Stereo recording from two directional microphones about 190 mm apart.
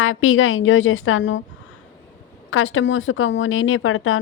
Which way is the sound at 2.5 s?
90° left.